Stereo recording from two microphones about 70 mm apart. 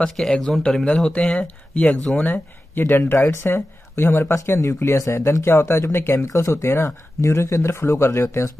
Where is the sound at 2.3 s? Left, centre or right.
Left.